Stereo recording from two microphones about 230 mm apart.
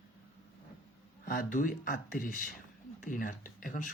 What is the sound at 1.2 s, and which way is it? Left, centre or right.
Speech, left.